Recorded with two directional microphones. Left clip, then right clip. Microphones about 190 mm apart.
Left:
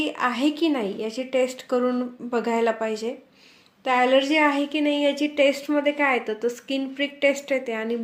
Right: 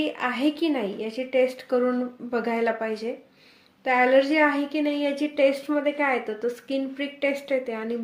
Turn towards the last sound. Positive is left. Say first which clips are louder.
# left 1 dB
turn(degrees=30)  # may be behind; listen again after turning